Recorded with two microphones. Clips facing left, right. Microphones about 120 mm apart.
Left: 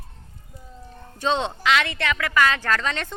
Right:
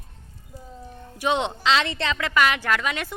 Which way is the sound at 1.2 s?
15° right (ahead or behind).